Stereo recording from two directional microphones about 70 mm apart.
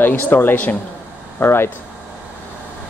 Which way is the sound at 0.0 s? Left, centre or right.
Left.